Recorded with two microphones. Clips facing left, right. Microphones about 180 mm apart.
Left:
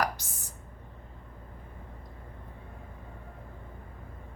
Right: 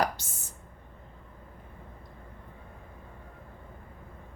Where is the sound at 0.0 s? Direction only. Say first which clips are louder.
Right 2 dB; 25° right (ahead or behind).